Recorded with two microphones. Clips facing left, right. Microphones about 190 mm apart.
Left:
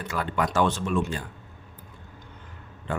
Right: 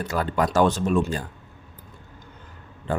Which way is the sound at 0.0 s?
40° right (ahead or behind).